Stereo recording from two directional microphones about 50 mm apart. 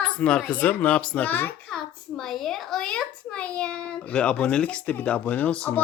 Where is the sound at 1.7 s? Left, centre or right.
Centre.